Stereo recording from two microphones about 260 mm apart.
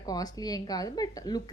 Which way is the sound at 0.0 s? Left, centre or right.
Centre.